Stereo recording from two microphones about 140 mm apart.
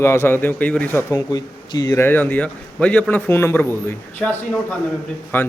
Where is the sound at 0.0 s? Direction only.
15° left (ahead or behind).